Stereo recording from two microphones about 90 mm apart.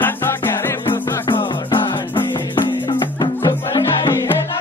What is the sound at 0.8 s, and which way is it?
Music, 70° left (ahead or behind).